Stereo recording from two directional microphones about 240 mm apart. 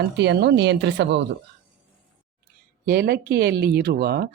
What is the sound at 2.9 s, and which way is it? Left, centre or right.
Speech, right.